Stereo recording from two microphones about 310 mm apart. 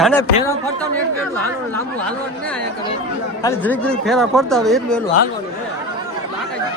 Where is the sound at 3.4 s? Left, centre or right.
Centre.